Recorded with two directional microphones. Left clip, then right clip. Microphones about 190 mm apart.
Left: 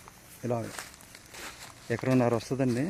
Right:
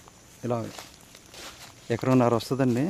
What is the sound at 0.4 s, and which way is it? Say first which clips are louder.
Speech: right 2 dB; 5° right (ahead or behind).